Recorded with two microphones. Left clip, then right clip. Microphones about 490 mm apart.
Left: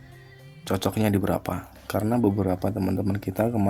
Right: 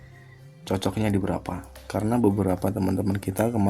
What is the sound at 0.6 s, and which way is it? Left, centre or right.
Speech, left.